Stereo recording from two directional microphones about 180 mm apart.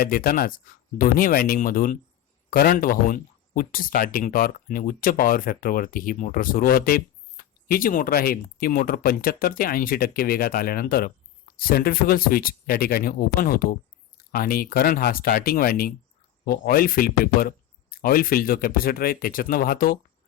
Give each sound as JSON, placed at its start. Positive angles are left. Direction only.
{"t": 0.0, "sound": "speech", "side_deg": 55}